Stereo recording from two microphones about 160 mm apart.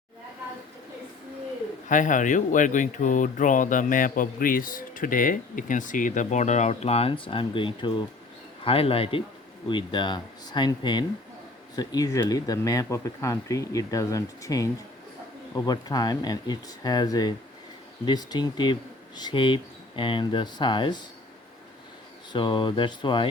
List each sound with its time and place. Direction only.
1.9 s speech: 55° left (ahead or behind); by 21.0 s 30° left (ahead or behind)
22.3 s speech: 30° left (ahead or behind)